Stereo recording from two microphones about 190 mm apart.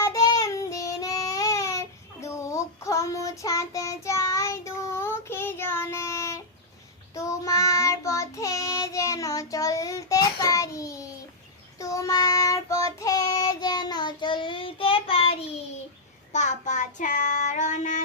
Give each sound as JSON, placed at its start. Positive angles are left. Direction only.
{"t": 0.0, "sound": "child singing", "side_deg": 20}